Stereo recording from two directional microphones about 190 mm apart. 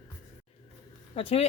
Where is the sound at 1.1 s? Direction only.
30° left (ahead or behind).